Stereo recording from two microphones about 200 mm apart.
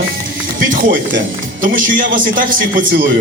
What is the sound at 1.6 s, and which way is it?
A man's voice, 45° right (ahead or behind).